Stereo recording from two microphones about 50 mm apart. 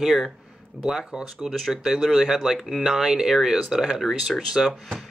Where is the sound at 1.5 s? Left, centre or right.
Centre.